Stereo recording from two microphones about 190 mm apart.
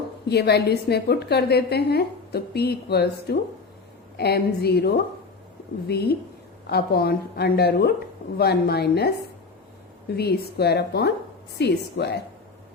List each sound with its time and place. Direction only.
0.3 s a woman's voice: 60° left (ahead or behind)
10.2 s a woman's voice: 55° left (ahead or behind)